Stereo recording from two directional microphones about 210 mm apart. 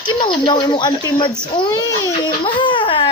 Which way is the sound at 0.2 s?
20° left (ahead or behind).